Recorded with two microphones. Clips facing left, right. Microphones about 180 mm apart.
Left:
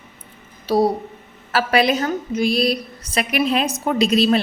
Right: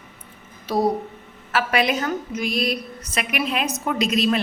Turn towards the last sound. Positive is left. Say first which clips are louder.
# left 4 dB
turn(degrees=30)  # may be behind; listen again after turning